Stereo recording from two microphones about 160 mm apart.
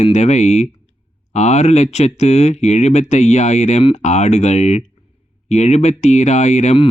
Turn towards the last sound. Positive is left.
turn(degrees=45)  # may be behind; listen again after turning